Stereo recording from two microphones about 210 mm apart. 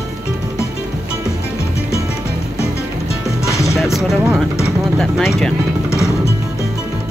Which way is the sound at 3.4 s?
15° left (ahead or behind).